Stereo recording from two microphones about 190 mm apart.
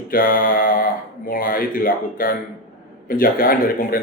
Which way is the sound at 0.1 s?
50° left (ahead or behind).